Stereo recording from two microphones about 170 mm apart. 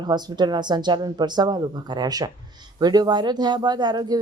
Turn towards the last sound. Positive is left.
turn(degrees=-25)  # may be behind; listen again after turning